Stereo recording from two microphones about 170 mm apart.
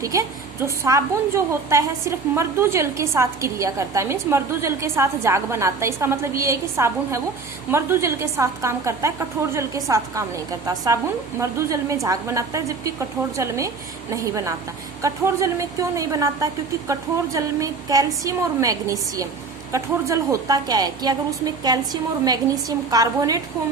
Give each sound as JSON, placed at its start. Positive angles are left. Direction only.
{"t": 0.0, "sound": "a woman's voice", "side_deg": -20}
{"t": 22.9, "sound": "a woman's voice", "side_deg": -20}